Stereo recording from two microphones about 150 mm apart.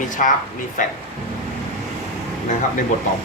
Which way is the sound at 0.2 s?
60° left (ahead or behind).